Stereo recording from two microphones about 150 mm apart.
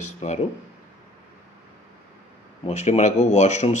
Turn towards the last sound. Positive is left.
turn(degrees=50)  # may be behind; listen again after turning